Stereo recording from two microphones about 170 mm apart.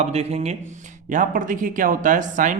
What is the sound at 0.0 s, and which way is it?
Speech, 40° right (ahead or behind).